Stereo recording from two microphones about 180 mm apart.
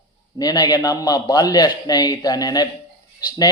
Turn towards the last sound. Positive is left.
turn(degrees=25)  # may be behind; listen again after turning